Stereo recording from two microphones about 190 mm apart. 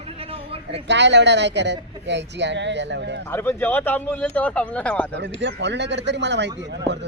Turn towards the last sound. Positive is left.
turn(degrees=-65)  # may be behind; listen again after turning